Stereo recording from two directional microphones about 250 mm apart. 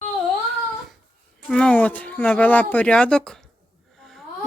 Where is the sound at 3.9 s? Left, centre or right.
Centre.